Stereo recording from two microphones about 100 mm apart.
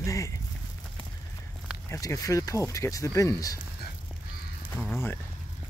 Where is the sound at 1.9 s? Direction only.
35° left (ahead or behind).